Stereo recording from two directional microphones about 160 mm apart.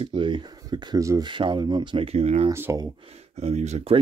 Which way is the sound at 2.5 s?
15° right (ahead or behind).